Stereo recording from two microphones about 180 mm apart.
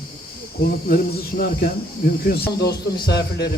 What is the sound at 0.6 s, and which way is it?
Speech, 55° left (ahead or behind).